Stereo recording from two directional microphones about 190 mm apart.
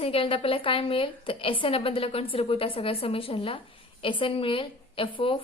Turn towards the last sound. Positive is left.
turn(degrees=25)  # may be behind; listen again after turning